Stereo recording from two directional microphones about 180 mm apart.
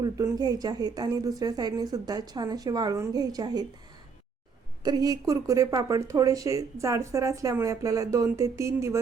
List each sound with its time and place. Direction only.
0.0 s speech: 20° right (ahead or behind)
4.8 s speech: 20° right (ahead or behind)